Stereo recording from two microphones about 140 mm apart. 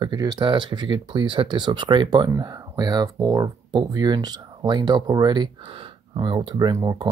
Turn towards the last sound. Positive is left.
turn(degrees=-25)  # may be behind; listen again after turning